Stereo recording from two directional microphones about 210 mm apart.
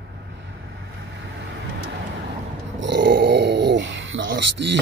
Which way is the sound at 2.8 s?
55° right (ahead or behind).